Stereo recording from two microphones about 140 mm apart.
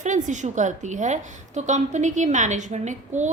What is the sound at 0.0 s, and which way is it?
A woman's voice, 60° right (ahead or behind).